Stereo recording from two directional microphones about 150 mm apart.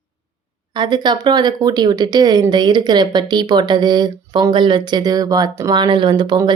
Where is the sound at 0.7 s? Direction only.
30° right (ahead or behind).